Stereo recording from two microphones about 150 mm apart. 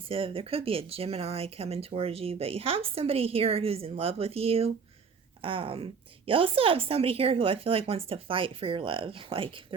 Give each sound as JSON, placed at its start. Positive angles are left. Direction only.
{"t": 0.1, "sound": "speech", "side_deg": -35}